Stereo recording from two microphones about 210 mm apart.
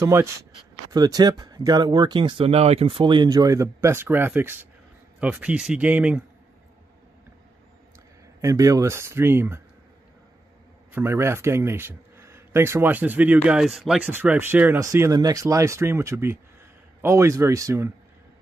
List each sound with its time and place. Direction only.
0.0 s a man's voice: 10° right (ahead or behind)
8.4 s a man's voice: 15° right (ahead or behind)
10.9 s a man's voice: 10° right (ahead or behind)